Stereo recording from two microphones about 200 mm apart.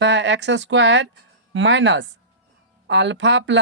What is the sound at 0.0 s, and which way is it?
Speech, 65° right (ahead or behind).